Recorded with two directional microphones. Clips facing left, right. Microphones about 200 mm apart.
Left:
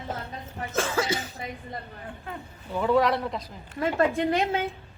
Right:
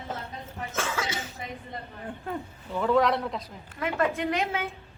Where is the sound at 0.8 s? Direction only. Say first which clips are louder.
Left 5 dB; 35° left (ahead or behind).